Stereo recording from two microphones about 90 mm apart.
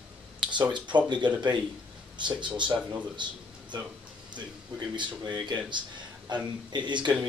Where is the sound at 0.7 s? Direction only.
60° right (ahead or behind).